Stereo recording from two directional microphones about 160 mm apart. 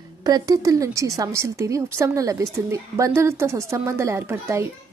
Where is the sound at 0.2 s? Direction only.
25° right (ahead or behind).